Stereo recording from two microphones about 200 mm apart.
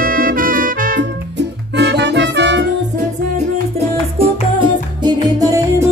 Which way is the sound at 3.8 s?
25° right (ahead or behind).